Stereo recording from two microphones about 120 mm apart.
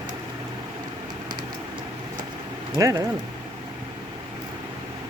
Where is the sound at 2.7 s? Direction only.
30° right (ahead or behind).